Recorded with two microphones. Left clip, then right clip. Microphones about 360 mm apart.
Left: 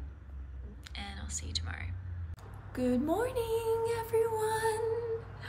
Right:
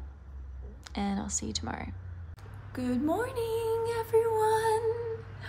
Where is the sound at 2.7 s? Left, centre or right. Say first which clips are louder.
Right 1 dB; centre.